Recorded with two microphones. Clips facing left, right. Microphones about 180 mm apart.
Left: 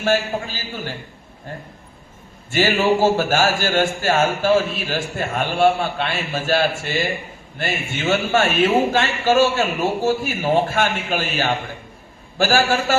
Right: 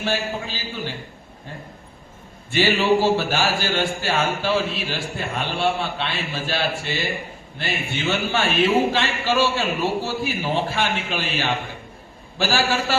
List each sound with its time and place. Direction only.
0.0 s a man's voice: 45° left (ahead or behind)
2.5 s a man's voice: 45° left (ahead or behind)